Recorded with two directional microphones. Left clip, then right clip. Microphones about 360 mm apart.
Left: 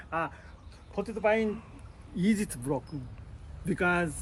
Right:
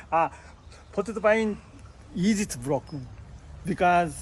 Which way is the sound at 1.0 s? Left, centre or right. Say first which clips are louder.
Right 4 dB; right.